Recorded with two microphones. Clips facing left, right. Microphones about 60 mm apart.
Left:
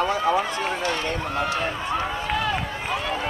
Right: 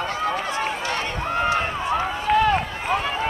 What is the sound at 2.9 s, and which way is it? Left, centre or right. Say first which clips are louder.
Run: right 4 dB; right.